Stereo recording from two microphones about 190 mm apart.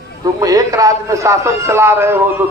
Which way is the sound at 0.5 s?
20° right (ahead or behind).